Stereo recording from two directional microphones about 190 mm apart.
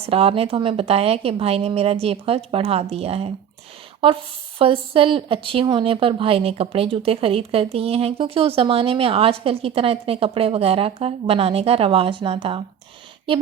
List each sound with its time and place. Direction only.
0.0 s a woman's voice: 30° right (ahead or behind)